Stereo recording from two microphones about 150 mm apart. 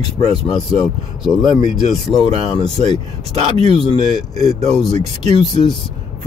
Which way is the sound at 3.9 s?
25° left (ahead or behind).